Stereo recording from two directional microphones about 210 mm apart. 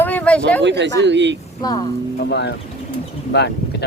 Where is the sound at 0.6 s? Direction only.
55° right (ahead or behind).